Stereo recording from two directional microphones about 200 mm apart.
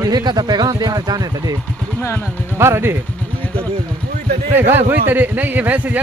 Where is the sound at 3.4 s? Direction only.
5° left (ahead or behind).